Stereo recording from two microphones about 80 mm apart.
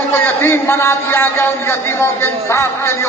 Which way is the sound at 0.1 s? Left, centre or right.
Left.